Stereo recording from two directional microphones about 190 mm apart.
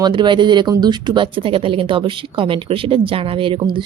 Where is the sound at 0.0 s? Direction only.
25° right (ahead or behind).